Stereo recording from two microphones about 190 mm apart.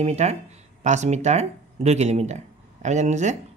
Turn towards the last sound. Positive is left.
turn(degrees=-40)  # may be behind; listen again after turning